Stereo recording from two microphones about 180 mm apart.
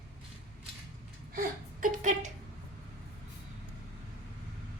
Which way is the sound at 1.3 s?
50° right (ahead or behind).